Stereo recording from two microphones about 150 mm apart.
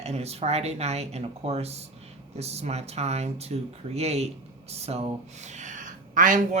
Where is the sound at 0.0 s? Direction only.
45° right (ahead or behind); by 6.6 s 60° right (ahead or behind).